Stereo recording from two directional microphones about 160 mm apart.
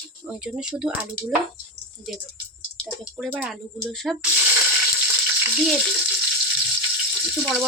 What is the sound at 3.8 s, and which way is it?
Speech, centre (ahead or behind).